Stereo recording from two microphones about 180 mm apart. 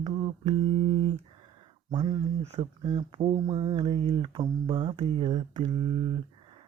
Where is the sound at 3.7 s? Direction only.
25° right (ahead or behind).